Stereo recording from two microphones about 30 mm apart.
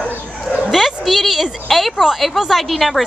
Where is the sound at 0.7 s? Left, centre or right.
Centre.